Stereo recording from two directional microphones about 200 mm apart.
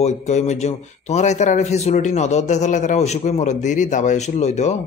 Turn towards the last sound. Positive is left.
turn(degrees=35)  # may be behind; listen again after turning